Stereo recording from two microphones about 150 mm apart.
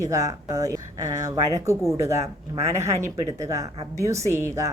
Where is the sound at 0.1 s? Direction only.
20° right (ahead or behind).